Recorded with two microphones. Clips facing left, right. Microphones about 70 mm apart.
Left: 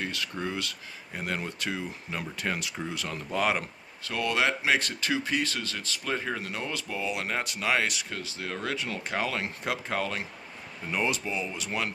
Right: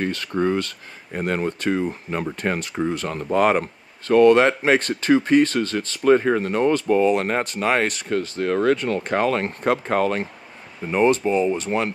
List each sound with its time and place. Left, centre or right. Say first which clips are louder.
0.0 s speech: right 11 dB; right
10.8 s speech: right 11 dB; right